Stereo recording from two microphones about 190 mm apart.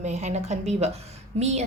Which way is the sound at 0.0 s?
35° right (ahead or behind).